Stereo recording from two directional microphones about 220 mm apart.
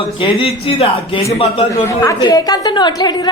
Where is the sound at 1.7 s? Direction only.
15° left (ahead or behind).